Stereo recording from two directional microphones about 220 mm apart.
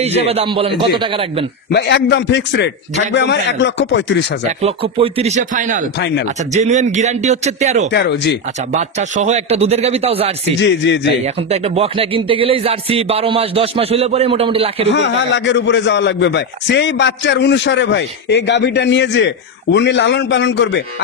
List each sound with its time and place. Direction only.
0.0 s music: 30° right (ahead or behind)
1.7 s a man's voice: 50° left (ahead or behind)
4.6 s music: 25° right (ahead or behind)
5.9 s a man's voice: 50° left (ahead or behind)
6.5 s speech: 30° right (ahead or behind)
7.9 s a man's voice: 50° left (ahead or behind)
9.1 s music: 30° right (ahead or behind)
10.4 s a man's voice: 50° left (ahead or behind)
11.5 s music: 30° right (ahead or behind)
14.9 s a man's voice: 55° left (ahead or behind)